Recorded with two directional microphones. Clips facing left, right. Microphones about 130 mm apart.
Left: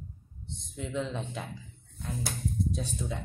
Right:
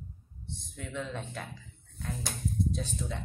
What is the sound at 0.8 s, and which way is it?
Speech, 20° left (ahead or behind).